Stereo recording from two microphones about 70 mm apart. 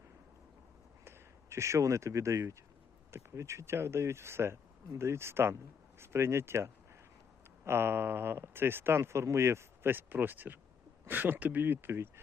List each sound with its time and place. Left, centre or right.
1.0 s speech: right